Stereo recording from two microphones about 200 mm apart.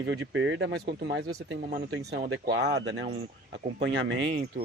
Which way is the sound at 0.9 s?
55° right (ahead or behind).